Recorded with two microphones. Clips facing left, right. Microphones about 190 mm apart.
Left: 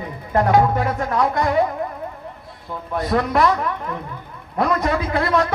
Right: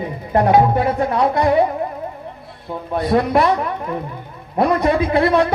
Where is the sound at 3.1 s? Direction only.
25° right (ahead or behind).